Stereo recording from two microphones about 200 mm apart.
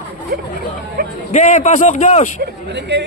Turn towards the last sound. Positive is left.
turn(degrees=-60)  # may be behind; listen again after turning